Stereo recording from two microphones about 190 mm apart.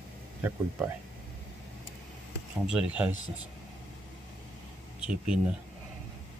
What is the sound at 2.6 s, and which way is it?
Speech, 5° right (ahead or behind).